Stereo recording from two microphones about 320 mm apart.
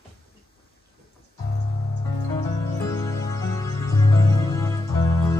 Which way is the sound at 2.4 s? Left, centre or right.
Centre.